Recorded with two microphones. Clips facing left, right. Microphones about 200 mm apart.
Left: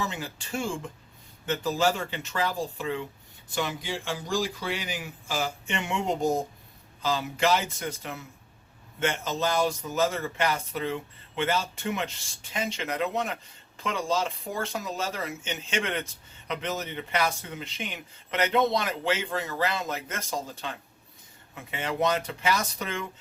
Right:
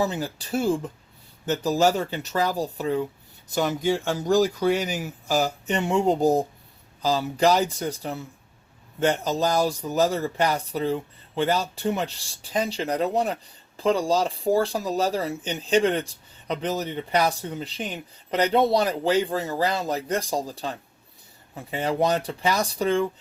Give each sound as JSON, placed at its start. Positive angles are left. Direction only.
{"t": 0.0, "sound": "speech", "side_deg": -35}